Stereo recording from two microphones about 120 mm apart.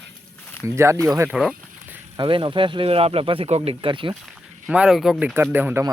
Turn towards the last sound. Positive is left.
turn(degrees=-15)  # may be behind; listen again after turning